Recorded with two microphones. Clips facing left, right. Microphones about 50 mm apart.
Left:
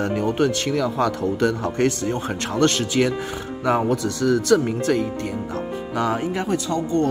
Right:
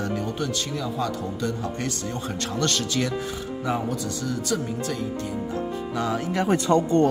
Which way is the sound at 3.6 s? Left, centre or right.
Left.